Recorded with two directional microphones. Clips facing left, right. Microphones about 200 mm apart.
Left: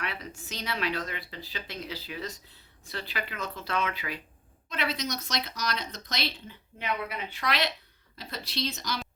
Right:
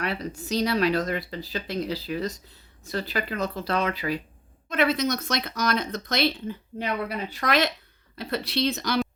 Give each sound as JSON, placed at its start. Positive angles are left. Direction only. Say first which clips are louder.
{"t": 0.0, "sound": "speech", "louder": "right 8 dB", "side_deg": -35}
{"t": 4.7, "sound": "speech", "louder": "right 9 dB", "side_deg": -50}
{"t": 6.7, "sound": "speech", "louder": "right 4 dB", "side_deg": -40}
{"t": 8.1, "sound": "speech", "louder": "right 9 dB", "side_deg": -60}